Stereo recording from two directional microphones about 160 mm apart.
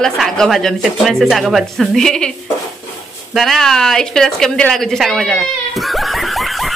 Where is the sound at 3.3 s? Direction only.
Centre (ahead or behind).